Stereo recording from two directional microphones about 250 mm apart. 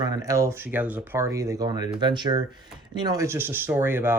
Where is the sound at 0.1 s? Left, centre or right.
Centre.